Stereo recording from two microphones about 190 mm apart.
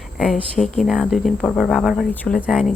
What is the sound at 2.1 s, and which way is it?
Speech, 10° left (ahead or behind).